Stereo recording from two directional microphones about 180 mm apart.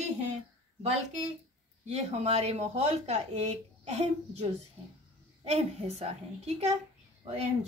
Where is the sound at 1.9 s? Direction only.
35° right (ahead or behind).